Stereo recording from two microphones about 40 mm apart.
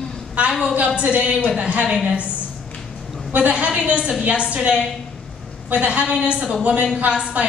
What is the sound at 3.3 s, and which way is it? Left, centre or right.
A woman's voice, right.